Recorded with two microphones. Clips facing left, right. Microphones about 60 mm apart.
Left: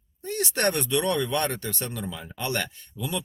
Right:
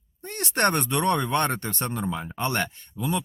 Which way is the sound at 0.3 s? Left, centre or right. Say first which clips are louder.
Right 2 dB; right.